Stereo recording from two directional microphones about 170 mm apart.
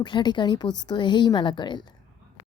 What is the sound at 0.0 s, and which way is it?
A woman's voice, 25° left (ahead or behind).